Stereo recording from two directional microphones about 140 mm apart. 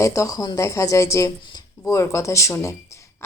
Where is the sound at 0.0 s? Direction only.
20° left (ahead or behind).